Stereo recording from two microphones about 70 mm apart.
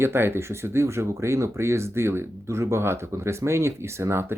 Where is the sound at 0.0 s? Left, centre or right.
Right.